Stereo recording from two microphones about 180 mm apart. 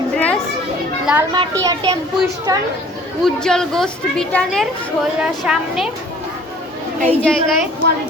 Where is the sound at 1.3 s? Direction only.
20° right (ahead or behind).